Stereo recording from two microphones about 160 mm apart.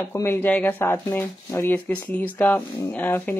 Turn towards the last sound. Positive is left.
turn(degrees=10)  # may be behind; listen again after turning